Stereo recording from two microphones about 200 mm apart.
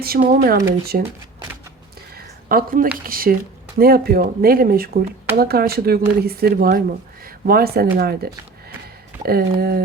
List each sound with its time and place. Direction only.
0.3 s speech: 50° right (ahead or behind)
2.1 s a sound: 45° right (ahead or behind)
3.1 s speech: 45° right (ahead or behind)